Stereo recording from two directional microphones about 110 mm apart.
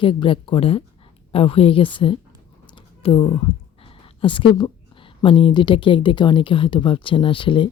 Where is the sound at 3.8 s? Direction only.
50° left (ahead or behind).